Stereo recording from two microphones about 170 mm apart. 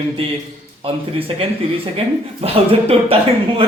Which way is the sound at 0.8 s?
35° right (ahead or behind).